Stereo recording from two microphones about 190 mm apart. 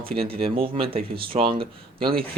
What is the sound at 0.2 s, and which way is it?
Speech, 30° right (ahead or behind).